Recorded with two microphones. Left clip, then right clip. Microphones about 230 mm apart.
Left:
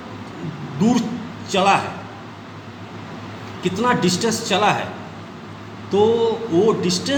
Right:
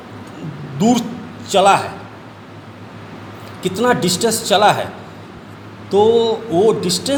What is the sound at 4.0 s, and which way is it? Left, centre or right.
Speech, right.